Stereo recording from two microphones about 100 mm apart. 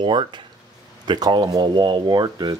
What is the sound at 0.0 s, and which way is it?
Speech, 55° right (ahead or behind).